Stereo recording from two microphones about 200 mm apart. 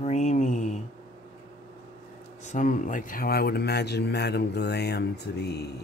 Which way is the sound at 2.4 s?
40° left (ahead or behind).